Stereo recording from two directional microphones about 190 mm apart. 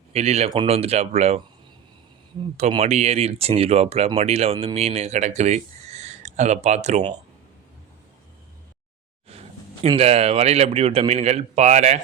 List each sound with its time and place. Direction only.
0.1 s speech: 35° right (ahead or behind)
2.6 s speech: 35° right (ahead or behind)
9.3 s a sound: 30° right (ahead or behind)
9.8 s speech: 30° right (ahead or behind)